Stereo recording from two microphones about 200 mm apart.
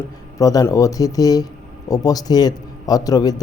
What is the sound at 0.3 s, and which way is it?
A man's voice, 15° left (ahead or behind).